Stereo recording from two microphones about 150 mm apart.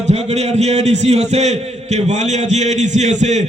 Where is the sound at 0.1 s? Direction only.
45° right (ahead or behind).